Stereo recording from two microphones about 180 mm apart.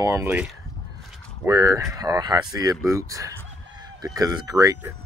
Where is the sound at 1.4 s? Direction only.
15° right (ahead or behind).